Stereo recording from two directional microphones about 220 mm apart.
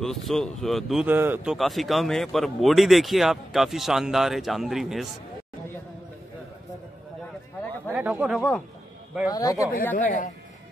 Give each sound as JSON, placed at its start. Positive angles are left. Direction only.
{"t": 0.0, "sound": "speech", "side_deg": 0}
{"t": 7.9, "sound": "speech", "side_deg": -5}
{"t": 9.3, "sound": "speech", "side_deg": 15}
{"t": 9.9, "sound": "speech", "side_deg": 35}